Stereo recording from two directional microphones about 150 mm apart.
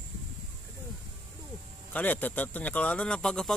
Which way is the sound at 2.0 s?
10° left (ahead or behind).